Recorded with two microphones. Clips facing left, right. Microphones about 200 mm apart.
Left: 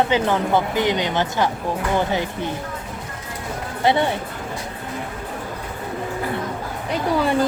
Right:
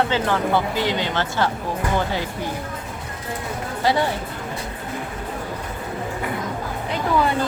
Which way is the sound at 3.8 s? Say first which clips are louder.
Left 2 dB; 20° left (ahead or behind).